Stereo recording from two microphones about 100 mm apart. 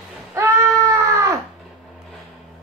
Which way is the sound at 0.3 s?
30° right (ahead or behind).